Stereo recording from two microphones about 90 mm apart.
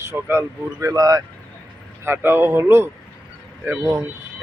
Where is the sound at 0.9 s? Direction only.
45° right (ahead or behind).